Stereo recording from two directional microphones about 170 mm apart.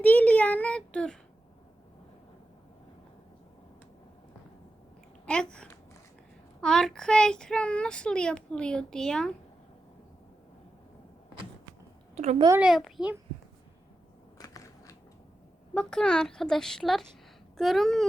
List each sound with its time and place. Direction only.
0.0 s a sound: 10° left (ahead or behind)
5.2 s speech: 5° left (ahead or behind)
12.1 s a woman's voice: 40° right (ahead or behind)
12.5 s speech: centre (ahead or behind)
14.3 s crushing: 20° left (ahead or behind)
15.7 s speech: 5° left (ahead or behind)